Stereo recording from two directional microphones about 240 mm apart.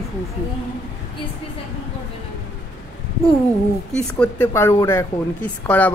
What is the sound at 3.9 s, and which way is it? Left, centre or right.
A woman's voice, centre.